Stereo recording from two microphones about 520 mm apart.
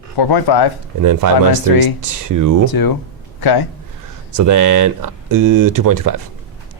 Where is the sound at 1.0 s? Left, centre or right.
Right.